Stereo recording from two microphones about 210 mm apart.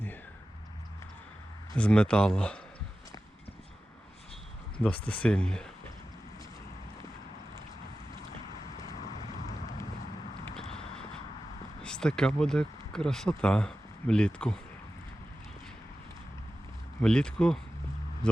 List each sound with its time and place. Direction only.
1.7 s speech: 5° left (ahead or behind)
4.8 s speech: 5° left (ahead or behind)
8.9 s vehicle: 35° left (ahead or behind)
10.4 s a sound: centre (ahead or behind)
11.8 s speech: 5° left (ahead or behind)
17.0 s speech: 5° left (ahead or behind)